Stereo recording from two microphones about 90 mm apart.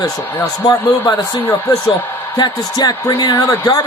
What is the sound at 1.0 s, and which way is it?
Speech, 35° left (ahead or behind).